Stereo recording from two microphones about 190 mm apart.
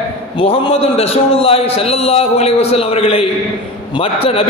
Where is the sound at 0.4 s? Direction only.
30° left (ahead or behind).